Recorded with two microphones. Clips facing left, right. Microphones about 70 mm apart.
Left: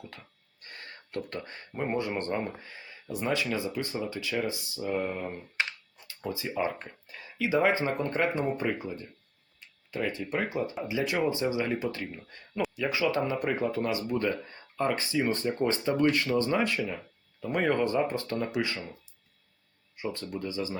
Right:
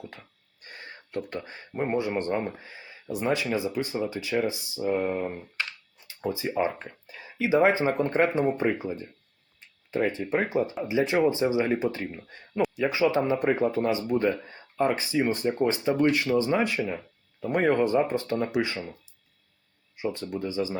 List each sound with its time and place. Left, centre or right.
0.0 s speech: centre
20.0 s speech: right